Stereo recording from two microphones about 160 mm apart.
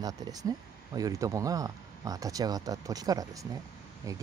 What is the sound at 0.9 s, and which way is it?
Speech, 20° right (ahead or behind).